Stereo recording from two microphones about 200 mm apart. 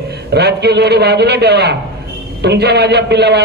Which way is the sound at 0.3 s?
55° right (ahead or behind).